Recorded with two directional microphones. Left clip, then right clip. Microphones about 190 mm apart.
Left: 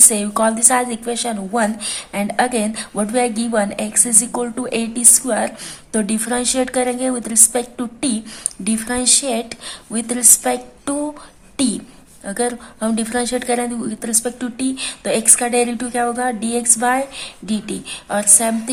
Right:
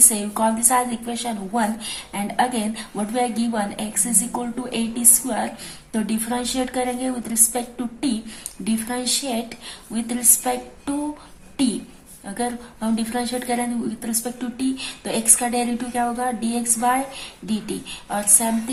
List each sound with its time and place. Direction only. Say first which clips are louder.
0.1 s a woman's voice: left 4 dB; 45° left (ahead or behind)